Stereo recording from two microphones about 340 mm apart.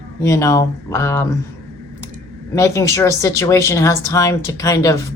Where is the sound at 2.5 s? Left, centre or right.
Centre.